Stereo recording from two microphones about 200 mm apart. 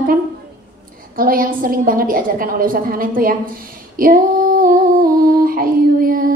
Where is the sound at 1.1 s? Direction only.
45° right (ahead or behind).